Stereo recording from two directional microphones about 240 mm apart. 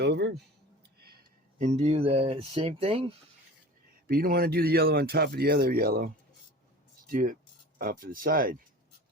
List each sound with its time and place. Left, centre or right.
0.0 s speech: right
4.0 s speech: right
7.1 s speech: right